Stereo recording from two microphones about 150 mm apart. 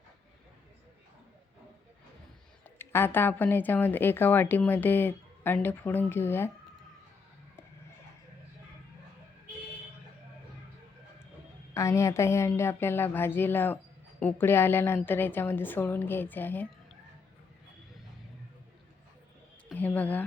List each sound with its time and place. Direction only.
2.7 s a woman's voice: 15° left (ahead or behind)
11.7 s a woman's voice: 20° left (ahead or behind)
19.7 s a woman's voice: 10° left (ahead or behind)